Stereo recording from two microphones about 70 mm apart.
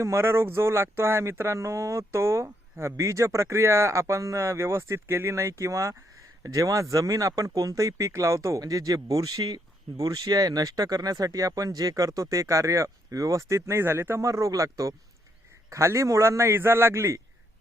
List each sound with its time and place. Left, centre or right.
0.0 s speech: right
13.7 s a man's voice: right
14.3 s a man's voice: right